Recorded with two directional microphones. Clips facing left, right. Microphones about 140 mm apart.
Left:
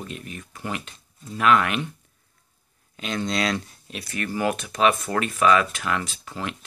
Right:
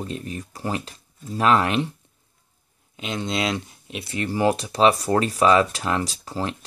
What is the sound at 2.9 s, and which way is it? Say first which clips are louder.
Speech: even; 20° right (ahead or behind).